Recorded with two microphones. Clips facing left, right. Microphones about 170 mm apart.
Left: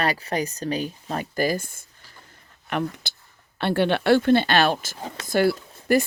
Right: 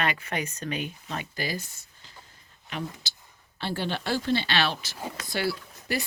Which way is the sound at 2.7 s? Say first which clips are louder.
Left 8 dB; 60° left (ahead or behind).